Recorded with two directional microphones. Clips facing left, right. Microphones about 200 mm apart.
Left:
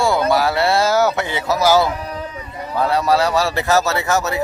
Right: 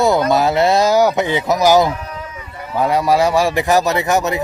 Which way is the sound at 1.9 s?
35° left (ahead or behind).